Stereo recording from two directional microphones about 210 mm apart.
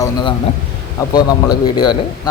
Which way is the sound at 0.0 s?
20° left (ahead or behind).